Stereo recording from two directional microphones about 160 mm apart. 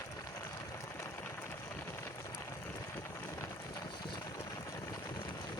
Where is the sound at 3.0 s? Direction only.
15° left (ahead or behind).